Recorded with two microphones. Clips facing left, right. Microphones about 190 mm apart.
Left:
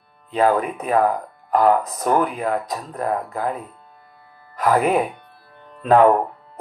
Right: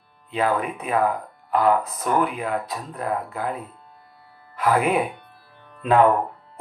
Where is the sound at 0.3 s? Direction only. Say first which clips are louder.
Left 5 dB; 40° left (ahead or behind).